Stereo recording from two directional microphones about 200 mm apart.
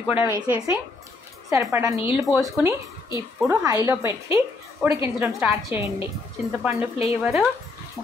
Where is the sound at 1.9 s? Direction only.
5° right (ahead or behind).